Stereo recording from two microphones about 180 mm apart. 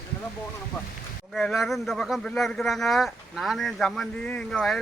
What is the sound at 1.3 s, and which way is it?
A man's voice, centre (ahead or behind).